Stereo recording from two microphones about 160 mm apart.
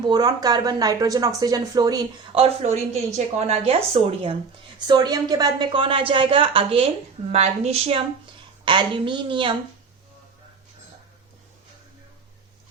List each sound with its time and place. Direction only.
0.1 s speech: 25° right (ahead or behind)
2.4 s a woman's voice: 40° right (ahead or behind)
4.9 s a woman's voice: 25° right (ahead or behind)